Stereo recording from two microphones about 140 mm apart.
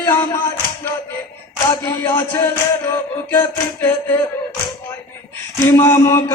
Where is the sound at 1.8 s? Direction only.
15° left (ahead or behind).